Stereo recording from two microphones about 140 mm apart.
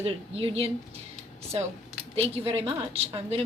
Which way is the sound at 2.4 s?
40° right (ahead or behind).